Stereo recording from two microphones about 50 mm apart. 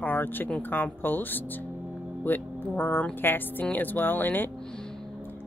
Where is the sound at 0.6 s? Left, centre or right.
Left.